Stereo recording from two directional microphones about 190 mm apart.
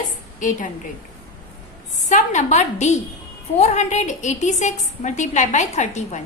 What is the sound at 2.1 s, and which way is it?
A woman's voice, 40° left (ahead or behind).